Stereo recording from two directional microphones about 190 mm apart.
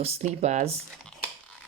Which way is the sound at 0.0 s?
35° right (ahead or behind).